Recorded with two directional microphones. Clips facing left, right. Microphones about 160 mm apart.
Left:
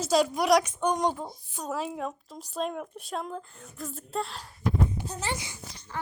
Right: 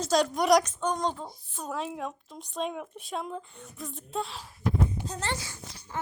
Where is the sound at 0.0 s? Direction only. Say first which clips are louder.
Left 1 dB; 5° left (ahead or behind).